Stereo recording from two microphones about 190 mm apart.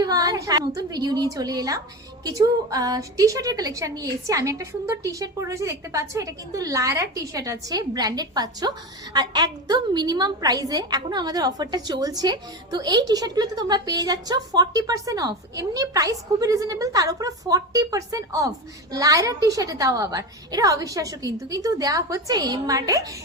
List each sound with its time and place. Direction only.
0.0 s a woman's voice: 20° right (ahead or behind)